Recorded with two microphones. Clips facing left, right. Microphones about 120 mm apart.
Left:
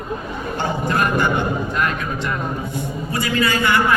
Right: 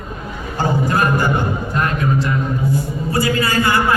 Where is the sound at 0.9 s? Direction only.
35° right (ahead or behind).